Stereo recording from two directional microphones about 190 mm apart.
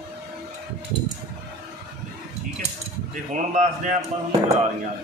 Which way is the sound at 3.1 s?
40° right (ahead or behind).